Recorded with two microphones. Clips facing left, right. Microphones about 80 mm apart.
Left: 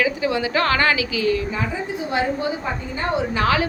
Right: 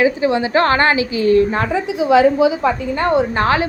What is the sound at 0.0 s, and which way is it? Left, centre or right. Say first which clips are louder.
A woman's voice: right 6 dB; right.